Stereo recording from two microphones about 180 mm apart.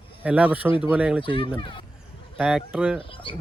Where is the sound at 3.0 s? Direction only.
30° left (ahead or behind).